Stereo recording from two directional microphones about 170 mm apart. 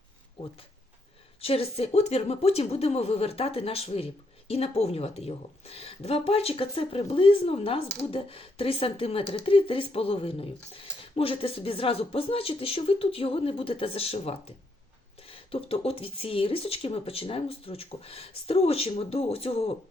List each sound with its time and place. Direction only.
1.4 s a woman's voice: 35° left (ahead or behind)